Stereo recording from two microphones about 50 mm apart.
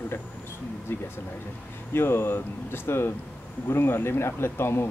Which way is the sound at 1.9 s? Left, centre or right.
Left.